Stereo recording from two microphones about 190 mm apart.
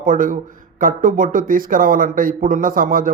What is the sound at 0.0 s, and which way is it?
Speech, 45° right (ahead or behind).